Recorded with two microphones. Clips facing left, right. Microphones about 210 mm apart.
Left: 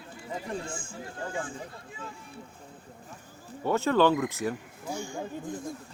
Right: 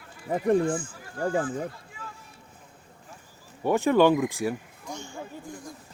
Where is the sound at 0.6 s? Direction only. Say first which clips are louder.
Right 10 dB; 25° left (ahead or behind).